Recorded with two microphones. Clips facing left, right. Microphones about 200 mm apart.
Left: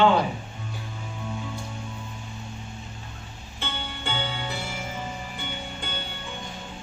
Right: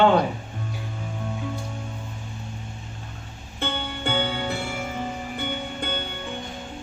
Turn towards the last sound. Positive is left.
turn(degrees=-55)  # may be behind; listen again after turning